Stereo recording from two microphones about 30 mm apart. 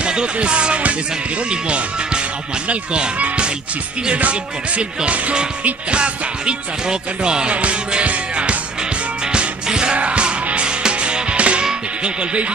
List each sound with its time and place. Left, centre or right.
0.0 s music: right
1.5 s speech: right
2.7 s music: right
4.3 s speech: right
5.9 s music: right
7.5 s music: right
9.7 s music: right
9.9 s music: right